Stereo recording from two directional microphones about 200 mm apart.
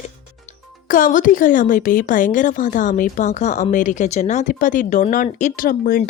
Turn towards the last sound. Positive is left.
turn(degrees=45)  # may be behind; listen again after turning